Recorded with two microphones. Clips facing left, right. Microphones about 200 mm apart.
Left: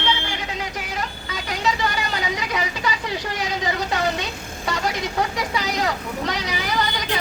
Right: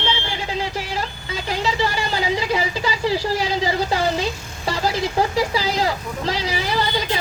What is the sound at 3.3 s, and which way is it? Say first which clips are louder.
Vehicle: right 4 dB; 30° right (ahead or behind).